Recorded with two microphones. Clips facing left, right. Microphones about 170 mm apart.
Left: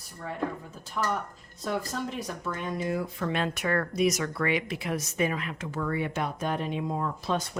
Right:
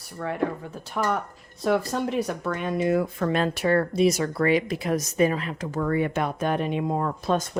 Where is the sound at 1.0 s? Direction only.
55° right (ahead or behind).